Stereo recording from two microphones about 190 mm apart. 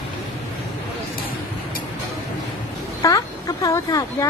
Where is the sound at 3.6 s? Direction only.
15° left (ahead or behind).